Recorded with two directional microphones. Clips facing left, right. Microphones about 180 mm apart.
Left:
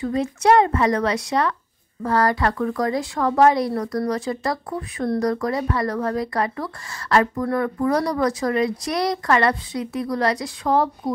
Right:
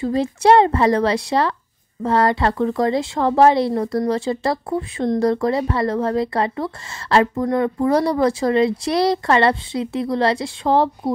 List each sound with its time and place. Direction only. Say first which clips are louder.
0.0 s speech: right 3 dB; 30° right (ahead or behind)